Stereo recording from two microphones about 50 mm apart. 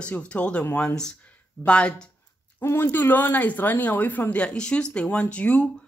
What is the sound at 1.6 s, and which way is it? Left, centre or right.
Speech, left.